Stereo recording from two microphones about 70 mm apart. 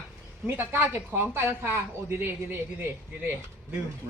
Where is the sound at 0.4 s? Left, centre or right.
Right.